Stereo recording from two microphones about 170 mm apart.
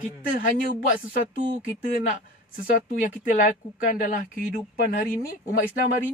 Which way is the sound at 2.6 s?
55° left (ahead or behind).